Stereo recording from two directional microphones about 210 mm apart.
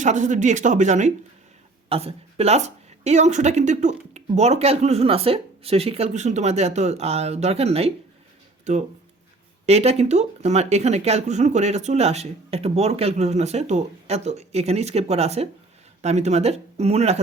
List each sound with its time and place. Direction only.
0.0 s speech: 35° right (ahead or behind)
9.6 s speech: 30° right (ahead or behind)